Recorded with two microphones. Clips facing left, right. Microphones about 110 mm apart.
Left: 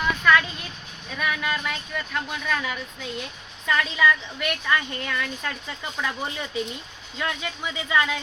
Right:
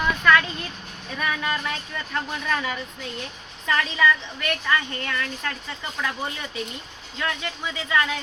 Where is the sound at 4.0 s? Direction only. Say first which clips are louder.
Even; 15° left (ahead or behind).